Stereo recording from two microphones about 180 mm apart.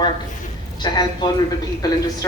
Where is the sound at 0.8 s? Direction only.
25° left (ahead or behind).